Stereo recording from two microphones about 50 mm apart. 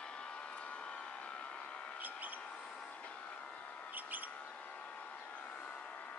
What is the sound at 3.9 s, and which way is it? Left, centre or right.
Bird, right.